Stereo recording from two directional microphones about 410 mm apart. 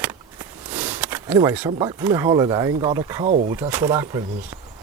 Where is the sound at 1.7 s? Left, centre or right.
Centre.